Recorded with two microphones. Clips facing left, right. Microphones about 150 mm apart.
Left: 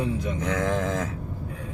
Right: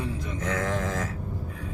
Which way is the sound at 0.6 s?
20° left (ahead or behind).